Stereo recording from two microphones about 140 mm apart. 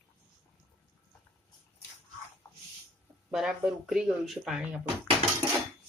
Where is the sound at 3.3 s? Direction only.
5° right (ahead or behind).